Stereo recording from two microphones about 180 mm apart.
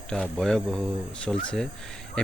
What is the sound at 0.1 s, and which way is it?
Speech, 5° left (ahead or behind).